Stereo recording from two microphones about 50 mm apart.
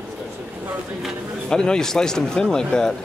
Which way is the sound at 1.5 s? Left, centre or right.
Centre.